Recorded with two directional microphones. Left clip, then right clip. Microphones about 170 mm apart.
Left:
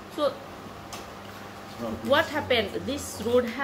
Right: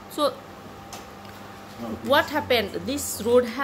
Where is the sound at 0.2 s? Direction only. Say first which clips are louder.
Right 3 dB; 40° right (ahead or behind).